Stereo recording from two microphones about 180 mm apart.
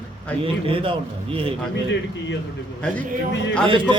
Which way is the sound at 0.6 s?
30° right (ahead or behind).